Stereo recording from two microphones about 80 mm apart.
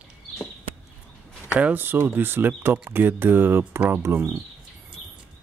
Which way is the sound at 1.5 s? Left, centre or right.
Right.